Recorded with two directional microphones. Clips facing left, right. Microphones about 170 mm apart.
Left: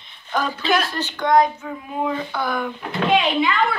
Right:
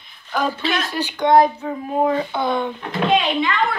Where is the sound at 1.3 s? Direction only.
35° right (ahead or behind).